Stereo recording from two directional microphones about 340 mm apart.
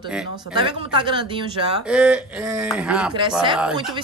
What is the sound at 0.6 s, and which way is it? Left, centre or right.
Speech, centre.